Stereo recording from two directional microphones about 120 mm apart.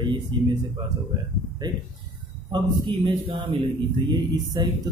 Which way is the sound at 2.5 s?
45° right (ahead or behind).